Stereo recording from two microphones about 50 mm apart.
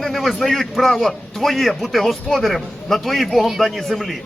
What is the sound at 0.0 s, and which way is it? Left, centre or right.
A man's voice, centre.